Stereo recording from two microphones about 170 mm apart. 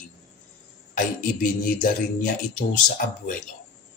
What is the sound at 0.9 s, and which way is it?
Speech, 50° left (ahead or behind).